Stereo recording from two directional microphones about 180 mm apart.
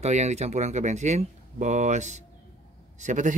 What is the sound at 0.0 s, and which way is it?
Speech, 40° right (ahead or behind).